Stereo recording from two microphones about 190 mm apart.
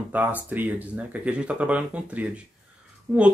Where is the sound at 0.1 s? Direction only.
10° right (ahead or behind).